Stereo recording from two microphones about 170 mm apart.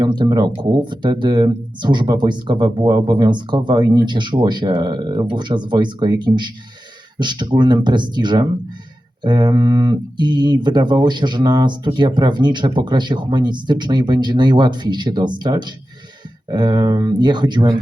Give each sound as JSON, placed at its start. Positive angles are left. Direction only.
{"t": 0.0, "sound": "speech", "side_deg": -25}